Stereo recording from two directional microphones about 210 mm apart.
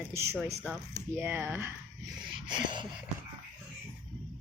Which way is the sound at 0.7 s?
10° left (ahead or behind).